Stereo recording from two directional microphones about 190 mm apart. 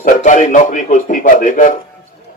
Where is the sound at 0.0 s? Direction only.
40° left (ahead or behind).